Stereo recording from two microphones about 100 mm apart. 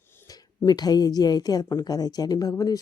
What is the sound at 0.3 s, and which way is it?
A woman's voice, 40° left (ahead or behind).